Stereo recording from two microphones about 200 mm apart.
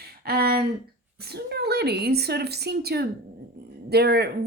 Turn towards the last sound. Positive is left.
turn(degrees=-55)  # may be behind; listen again after turning